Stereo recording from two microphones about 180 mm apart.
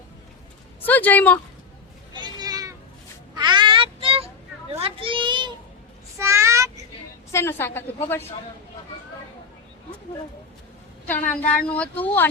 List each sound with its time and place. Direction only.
0.8 s a woman's voice: 10° left (ahead or behind)
2.1 s children playing: 20° right (ahead or behind)
3.3 s meow: 25° right (ahead or behind)
4.8 s children playing: 30° right (ahead or behind)
6.1 s a sound: 15° right (ahead or behind)
7.3 s a woman's voice: 15° left (ahead or behind)
11.0 s a woman's voice: 10° left (ahead or behind)